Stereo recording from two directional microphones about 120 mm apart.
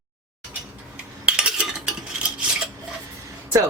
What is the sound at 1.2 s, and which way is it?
Cutlery, 10° right (ahead or behind).